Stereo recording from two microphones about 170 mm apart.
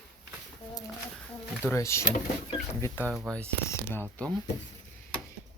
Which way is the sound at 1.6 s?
15° left (ahead or behind).